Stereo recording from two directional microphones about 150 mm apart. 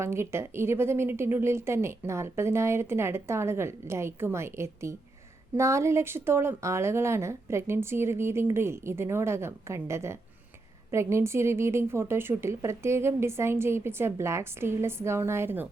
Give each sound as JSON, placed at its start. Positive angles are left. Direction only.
{"t": 0.0, "sound": "speech", "side_deg": -20}